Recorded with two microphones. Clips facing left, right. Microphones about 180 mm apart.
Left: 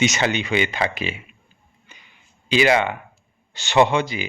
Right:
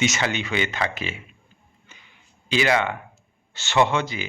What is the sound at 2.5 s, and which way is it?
Speech, 15° left (ahead or behind).